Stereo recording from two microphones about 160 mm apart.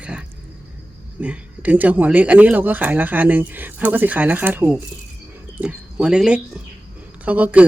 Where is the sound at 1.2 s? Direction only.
10° right (ahead or behind).